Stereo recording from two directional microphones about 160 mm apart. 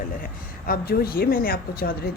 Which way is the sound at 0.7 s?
70° left (ahead or behind).